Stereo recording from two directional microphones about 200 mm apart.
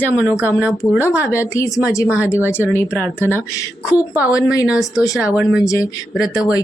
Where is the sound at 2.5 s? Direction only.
10° left (ahead or behind).